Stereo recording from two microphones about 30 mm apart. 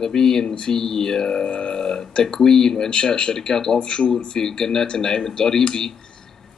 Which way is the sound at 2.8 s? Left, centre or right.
Left.